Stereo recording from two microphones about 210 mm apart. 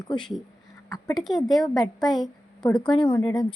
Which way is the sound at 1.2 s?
Centre (ahead or behind).